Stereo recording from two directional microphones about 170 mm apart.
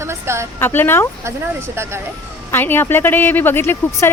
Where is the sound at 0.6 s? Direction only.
10° left (ahead or behind).